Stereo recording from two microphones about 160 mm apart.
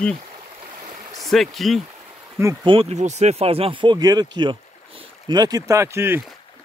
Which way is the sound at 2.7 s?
40° right (ahead or behind).